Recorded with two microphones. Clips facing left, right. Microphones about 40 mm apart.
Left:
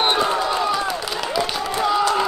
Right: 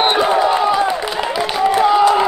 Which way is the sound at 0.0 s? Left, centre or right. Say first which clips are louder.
Right 5 dB; right.